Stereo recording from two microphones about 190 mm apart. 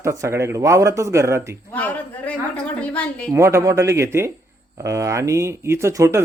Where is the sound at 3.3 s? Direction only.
15° right (ahead or behind).